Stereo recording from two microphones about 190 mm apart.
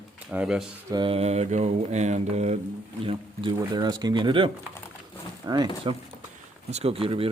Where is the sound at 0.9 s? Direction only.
25° right (ahead or behind).